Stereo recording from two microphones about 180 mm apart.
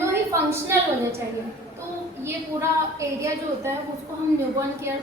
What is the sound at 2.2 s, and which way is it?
A woman's voice, 15° right (ahead or behind).